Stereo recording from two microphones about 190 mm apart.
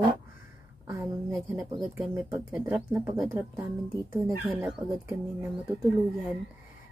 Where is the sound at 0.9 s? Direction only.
15° right (ahead or behind).